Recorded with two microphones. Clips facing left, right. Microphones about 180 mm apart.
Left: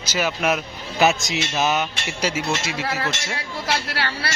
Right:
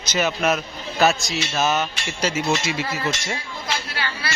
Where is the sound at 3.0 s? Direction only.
70° left (ahead or behind).